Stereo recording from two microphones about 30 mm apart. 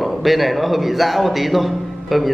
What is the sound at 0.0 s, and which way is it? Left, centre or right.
A man's voice, centre.